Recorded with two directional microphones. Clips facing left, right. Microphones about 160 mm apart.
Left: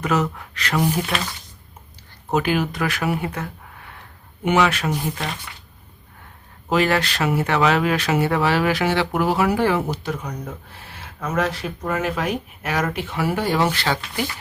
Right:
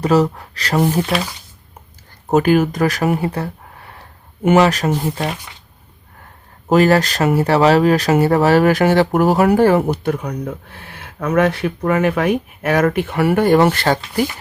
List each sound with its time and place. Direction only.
0.0 s speech: 35° right (ahead or behind)
2.3 s speech: 45° right (ahead or behind)
6.7 s speech: 40° right (ahead or behind)